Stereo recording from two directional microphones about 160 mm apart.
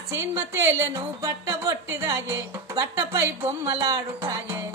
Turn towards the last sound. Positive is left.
turn(degrees=-20)  # may be behind; listen again after turning